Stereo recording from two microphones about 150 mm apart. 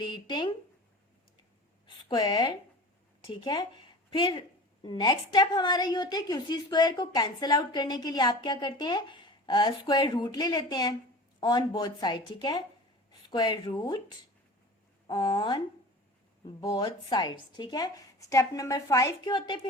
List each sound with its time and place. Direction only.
0.0 s a sound: 30° left (ahead or behind)
2.0 s a woman's voice: 30° left (ahead or behind)
15.0 s a woman's voice: 30° left (ahead or behind)